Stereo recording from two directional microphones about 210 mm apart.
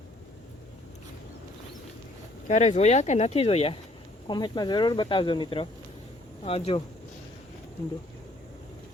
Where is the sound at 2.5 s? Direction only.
35° left (ahead or behind).